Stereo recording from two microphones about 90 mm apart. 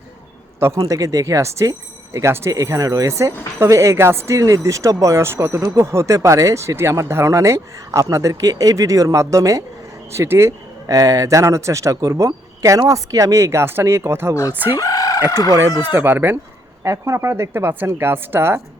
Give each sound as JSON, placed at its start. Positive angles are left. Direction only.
{"t": 0.8, "sound": "speech", "side_deg": -40}
{"t": 14.8, "sound": "chicken", "side_deg": 45}
{"t": 15.3, "sound": "speech", "side_deg": 45}
{"t": 15.8, "sound": "a woman's voice", "side_deg": -25}
{"t": 16.8, "sound": "a woman's voice", "side_deg": -35}